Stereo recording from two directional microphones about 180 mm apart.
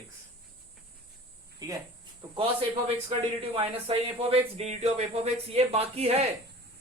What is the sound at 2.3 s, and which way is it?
A man's voice, 30° right (ahead or behind).